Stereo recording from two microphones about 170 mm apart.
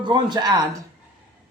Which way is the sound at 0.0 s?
25° right (ahead or behind).